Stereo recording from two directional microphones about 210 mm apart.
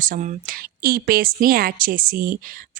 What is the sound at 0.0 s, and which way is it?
Speech, 40° right (ahead or behind).